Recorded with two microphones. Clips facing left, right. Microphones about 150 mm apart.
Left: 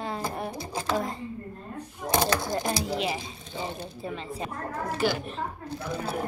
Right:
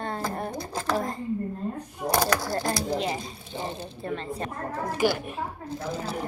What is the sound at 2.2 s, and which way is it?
Speech, 25° left (ahead or behind).